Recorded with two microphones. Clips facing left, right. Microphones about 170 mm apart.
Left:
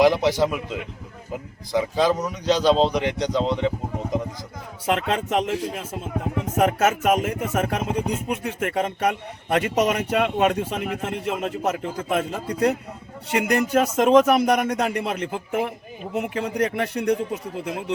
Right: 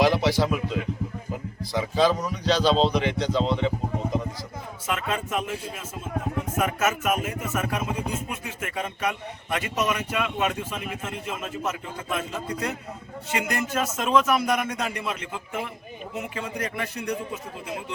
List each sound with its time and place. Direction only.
0.0 s speech: 15° left (ahead or behind)
4.9 s speech: 65° left (ahead or behind)
6.6 s speech: 60° left (ahead or behind)